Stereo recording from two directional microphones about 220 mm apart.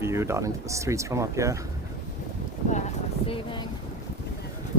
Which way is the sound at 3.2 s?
25° left (ahead or behind).